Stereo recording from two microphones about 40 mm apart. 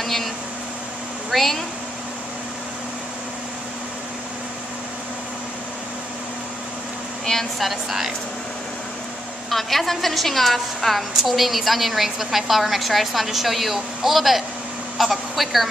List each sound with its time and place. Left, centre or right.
0.0 s a sound: centre
1.3 s speech: centre
7.5 s a woman's voice: centre
9.5 s a woman's voice: centre